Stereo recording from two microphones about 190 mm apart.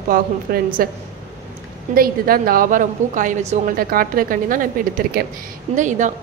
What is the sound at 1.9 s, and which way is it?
A woman's voice, 50° right (ahead or behind).